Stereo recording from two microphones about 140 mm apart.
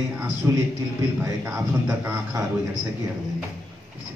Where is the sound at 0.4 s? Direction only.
20° right (ahead or behind).